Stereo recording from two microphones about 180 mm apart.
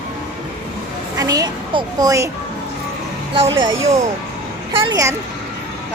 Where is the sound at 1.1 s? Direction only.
20° right (ahead or behind).